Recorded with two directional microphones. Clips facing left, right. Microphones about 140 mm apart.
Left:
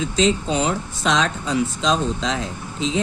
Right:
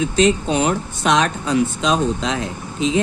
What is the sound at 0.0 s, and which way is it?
Speech, 65° right (ahead or behind).